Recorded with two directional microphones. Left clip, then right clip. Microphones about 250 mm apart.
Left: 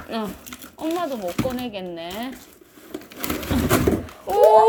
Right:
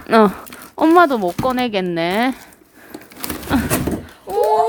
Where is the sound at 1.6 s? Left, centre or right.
Right.